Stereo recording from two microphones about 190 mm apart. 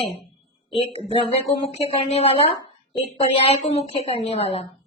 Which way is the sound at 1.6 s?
30° left (ahead or behind).